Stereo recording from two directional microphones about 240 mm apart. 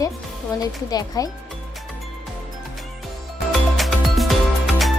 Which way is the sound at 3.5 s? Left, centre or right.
Centre.